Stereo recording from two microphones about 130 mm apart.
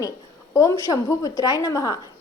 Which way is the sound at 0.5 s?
25° left (ahead or behind).